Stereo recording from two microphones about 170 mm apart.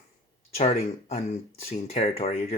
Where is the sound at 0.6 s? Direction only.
40° left (ahead or behind).